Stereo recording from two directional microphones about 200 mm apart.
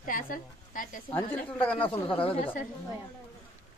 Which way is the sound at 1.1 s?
10° left (ahead or behind).